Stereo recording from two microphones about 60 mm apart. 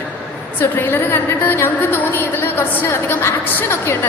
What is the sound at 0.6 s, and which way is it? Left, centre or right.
A woman's voice, left.